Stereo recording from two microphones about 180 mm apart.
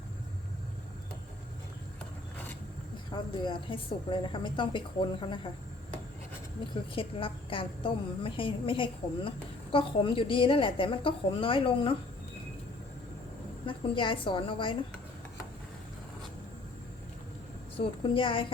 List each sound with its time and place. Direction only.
3.1 s a woman's voice: 25° left (ahead or behind)
6.9 s a woman's voice: 30° left (ahead or behind)
13.7 s a woman's voice: 25° left (ahead or behind)
17.7 s a woman's voice: 30° left (ahead or behind)